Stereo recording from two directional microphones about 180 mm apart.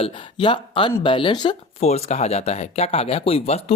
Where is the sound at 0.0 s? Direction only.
30° left (ahead or behind).